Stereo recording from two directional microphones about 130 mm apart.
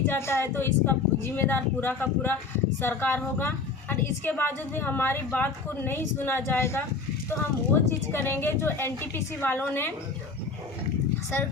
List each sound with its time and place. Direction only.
0.1 s a woman's voice: 20° left (ahead or behind)